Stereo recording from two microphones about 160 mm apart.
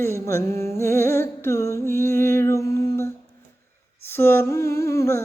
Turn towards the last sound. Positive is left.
turn(degrees=15)  # may be behind; listen again after turning